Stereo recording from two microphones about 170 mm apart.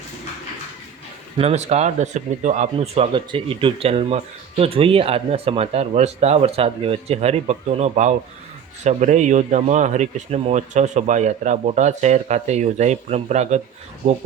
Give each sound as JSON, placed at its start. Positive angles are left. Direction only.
{"t": 1.4, "sound": "speech", "side_deg": -40}